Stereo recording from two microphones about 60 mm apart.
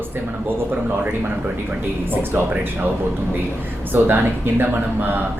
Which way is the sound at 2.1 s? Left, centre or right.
Right.